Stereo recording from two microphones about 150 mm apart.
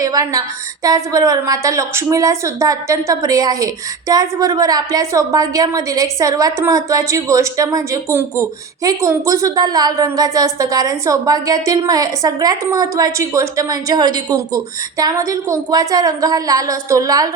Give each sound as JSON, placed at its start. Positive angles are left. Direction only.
{"t": 0.0, "sound": "a woman's voice", "side_deg": -25}